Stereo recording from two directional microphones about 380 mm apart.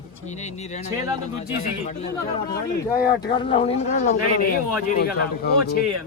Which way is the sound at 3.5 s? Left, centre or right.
Centre.